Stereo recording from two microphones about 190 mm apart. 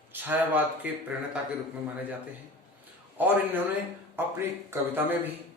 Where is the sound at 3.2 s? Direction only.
10° right (ahead or behind).